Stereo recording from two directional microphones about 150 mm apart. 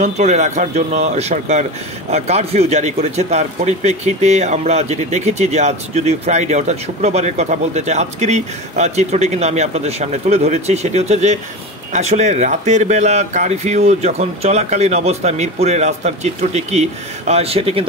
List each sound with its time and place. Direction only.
0.0 s a man's voice: 50° right (ahead or behind)